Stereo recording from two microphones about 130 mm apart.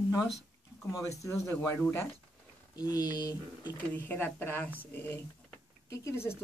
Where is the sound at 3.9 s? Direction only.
15° left (ahead or behind).